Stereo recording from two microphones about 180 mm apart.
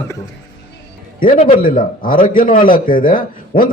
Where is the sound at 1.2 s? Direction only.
50° left (ahead or behind).